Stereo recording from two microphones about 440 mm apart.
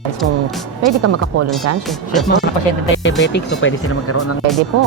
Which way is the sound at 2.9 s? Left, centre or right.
Left.